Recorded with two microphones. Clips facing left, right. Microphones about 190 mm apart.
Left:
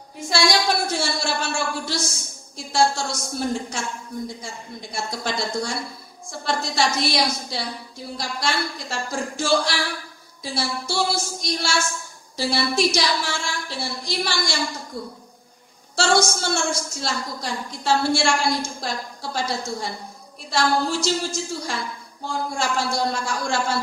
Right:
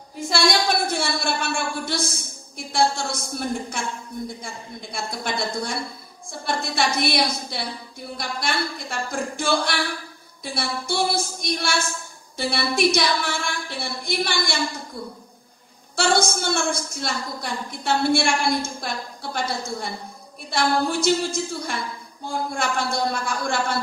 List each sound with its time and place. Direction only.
0.3 s a woman's voice: 55° right (ahead or behind)
4.9 s a woman's voice: 55° right (ahead or behind)
16.0 s a woman's voice: 55° right (ahead or behind)